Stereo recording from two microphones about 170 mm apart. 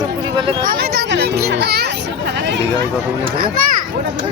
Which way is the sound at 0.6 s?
65° right (ahead or behind).